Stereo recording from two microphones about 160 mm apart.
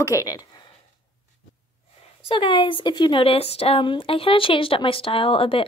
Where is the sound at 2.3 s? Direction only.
30° left (ahead or behind).